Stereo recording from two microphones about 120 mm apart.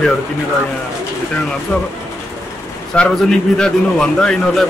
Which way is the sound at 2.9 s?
5° left (ahead or behind).